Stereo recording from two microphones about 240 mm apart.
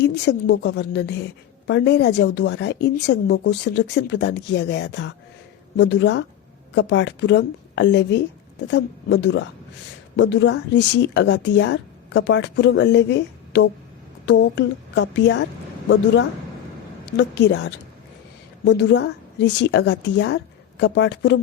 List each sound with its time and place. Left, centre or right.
0.0 s a woman's voice: left
17.2 s a woman's voice: left